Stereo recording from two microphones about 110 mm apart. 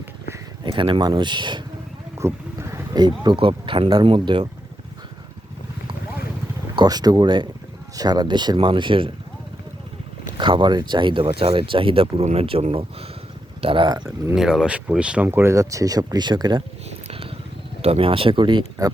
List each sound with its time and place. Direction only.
0.6 s speech: 50° right (ahead or behind)
2.1 s wild animals: 25° right (ahead or behind)
3.3 s speech: 55° right (ahead or behind)
6.7 s speech: 35° right (ahead or behind)
10.3 s speech: 45° right (ahead or behind); by 13.1 s 65° right (ahead or behind)
13.6 s speech: 55° right (ahead or behind)
14.3 s speech: 5° right (ahead or behind); by 16.6 s 45° right (ahead or behind)
17.1 s a sound: 60° right (ahead or behind)
17.8 s speech: 60° right (ahead or behind)